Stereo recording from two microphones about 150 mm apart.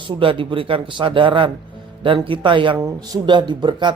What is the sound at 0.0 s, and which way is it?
Speech, 35° right (ahead or behind).